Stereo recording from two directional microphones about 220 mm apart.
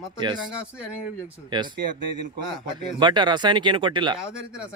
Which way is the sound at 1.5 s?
20° right (ahead or behind).